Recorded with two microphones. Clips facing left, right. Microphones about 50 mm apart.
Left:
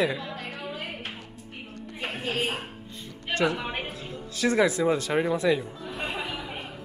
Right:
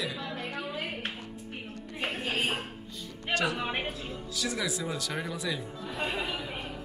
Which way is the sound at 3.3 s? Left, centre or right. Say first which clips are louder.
Left 4 dB; left.